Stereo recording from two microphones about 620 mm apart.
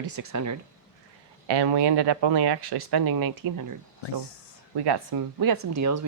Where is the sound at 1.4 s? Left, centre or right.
Right.